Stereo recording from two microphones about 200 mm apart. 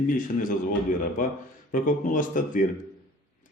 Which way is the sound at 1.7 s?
45° left (ahead or behind).